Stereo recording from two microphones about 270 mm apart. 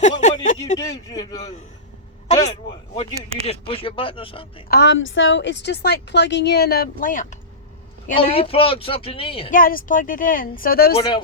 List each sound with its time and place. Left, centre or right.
0.2 s a sound: left
0.8 s speech: centre
4.7 s a woman's voice: left; by 9.5 s centre
9.5 s a woman's voice: left